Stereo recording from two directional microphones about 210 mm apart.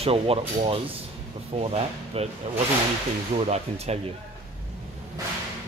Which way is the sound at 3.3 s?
30° right (ahead or behind).